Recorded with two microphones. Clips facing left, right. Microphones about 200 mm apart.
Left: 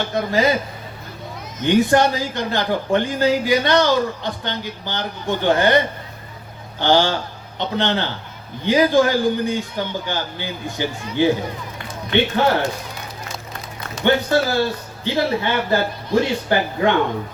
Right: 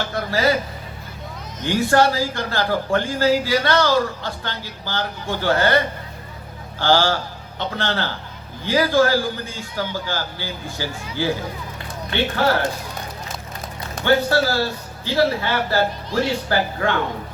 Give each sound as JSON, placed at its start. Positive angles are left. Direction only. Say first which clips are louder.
{"t": 0.1, "sound": "speech", "louder": "left 2 dB", "side_deg": 20}
{"t": 1.6, "sound": "speech", "louder": "left 2 dB", "side_deg": 20}
{"t": 14.0, "sound": "speech", "louder": "left 1 dB", "side_deg": 20}